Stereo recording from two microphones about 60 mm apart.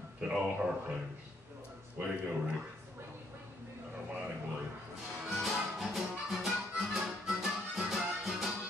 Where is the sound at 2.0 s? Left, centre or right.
Right.